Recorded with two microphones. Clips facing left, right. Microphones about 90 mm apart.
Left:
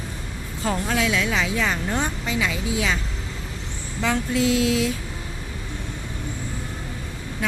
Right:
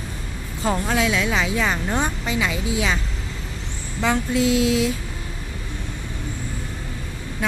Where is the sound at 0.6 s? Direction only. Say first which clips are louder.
Right 2 dB; 25° right (ahead or behind).